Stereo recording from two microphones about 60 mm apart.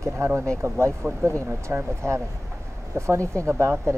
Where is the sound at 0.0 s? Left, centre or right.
Right.